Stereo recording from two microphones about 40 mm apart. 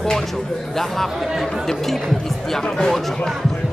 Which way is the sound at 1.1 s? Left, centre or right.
Centre.